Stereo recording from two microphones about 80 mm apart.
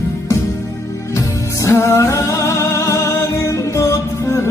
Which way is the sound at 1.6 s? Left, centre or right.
Left.